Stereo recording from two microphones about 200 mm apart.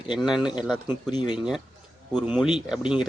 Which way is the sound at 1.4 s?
5° right (ahead or behind).